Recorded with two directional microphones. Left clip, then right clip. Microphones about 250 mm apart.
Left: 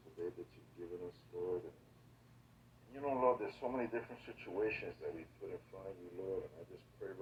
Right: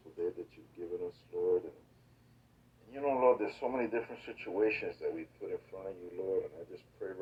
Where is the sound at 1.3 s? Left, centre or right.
Right.